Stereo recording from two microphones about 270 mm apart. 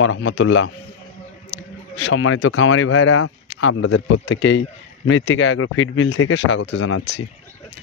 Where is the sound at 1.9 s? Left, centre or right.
Left.